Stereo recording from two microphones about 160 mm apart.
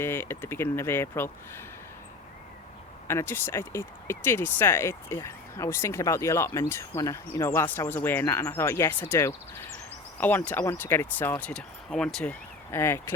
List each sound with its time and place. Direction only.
0.0 s speech: 15° left (ahead or behind)
3.1 s speech: 15° left (ahead or behind)